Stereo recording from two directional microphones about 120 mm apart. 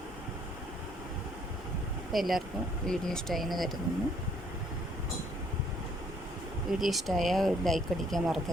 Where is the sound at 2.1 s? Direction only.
Centre (ahead or behind).